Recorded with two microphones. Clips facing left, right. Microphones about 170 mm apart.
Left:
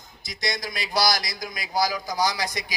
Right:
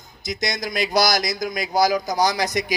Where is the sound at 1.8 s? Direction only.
45° right (ahead or behind).